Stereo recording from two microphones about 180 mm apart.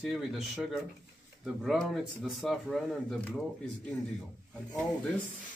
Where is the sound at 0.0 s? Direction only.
5° right (ahead or behind).